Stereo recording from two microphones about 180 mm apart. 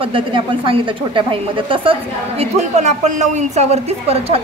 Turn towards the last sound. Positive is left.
turn(degrees=-35)  # may be behind; listen again after turning